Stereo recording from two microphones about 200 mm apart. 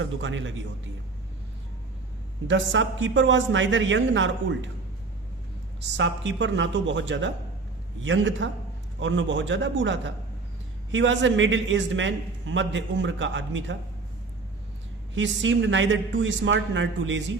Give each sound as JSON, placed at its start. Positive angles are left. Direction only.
{"t": 0.0, "sound": "a man's voice", "side_deg": -70}
{"t": 2.5, "sound": "a man's voice", "side_deg": -70}
{"t": 6.0, "sound": "a man's voice", "side_deg": -65}
{"t": 15.1, "sound": "a man's voice", "side_deg": -65}